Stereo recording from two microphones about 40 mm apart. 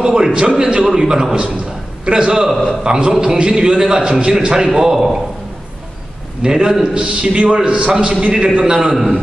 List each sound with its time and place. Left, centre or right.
0.0 s a man's voice: centre
4.7 s a man's voice: centre
6.4 s a man's voice: centre